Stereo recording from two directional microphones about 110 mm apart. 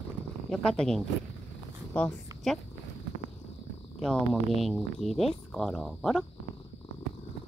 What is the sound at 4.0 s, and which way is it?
Speech, centre (ahead or behind).